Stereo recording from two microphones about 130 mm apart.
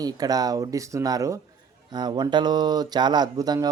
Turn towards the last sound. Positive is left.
turn(degrees=-30)  # may be behind; listen again after turning